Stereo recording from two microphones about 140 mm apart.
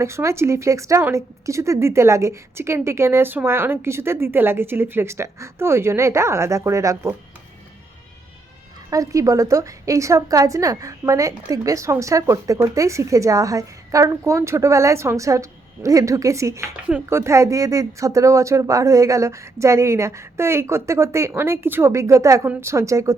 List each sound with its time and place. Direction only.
0.0 s a woman's voice: 20° right (ahead or behind)
8.9 s a woman's voice: 25° right (ahead or behind)